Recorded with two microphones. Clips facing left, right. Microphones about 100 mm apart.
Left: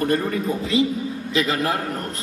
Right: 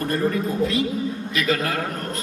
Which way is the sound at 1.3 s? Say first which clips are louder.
Left 2 dB; 25° left (ahead or behind).